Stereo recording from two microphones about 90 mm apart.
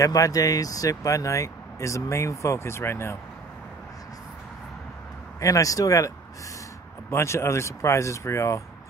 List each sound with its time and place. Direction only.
0.0 s speech: 40° left (ahead or behind)
5.4 s speech: 40° left (ahead or behind)